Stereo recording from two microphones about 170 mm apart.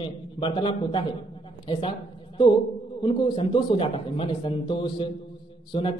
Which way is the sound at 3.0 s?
25° left (ahead or behind).